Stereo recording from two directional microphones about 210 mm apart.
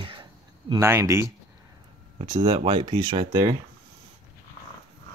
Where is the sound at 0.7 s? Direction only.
10° right (ahead or behind).